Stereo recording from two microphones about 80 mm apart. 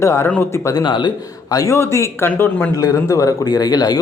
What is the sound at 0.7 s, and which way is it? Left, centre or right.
A man's voice, left.